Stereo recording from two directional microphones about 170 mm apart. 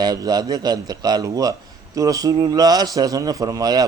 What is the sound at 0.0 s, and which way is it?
A man's voice, 25° right (ahead or behind).